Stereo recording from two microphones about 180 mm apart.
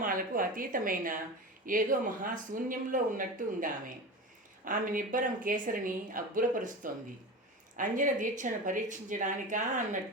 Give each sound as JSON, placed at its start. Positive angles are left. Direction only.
{"t": 0.0, "sound": "a woman's voice", "side_deg": -50}